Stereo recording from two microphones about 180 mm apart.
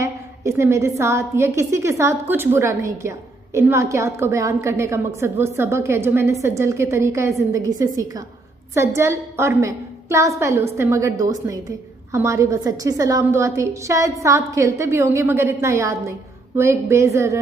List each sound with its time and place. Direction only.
0.0 s a woman's voice: 15° right (ahead or behind)